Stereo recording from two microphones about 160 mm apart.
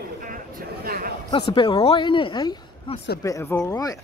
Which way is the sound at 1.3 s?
30° left (ahead or behind).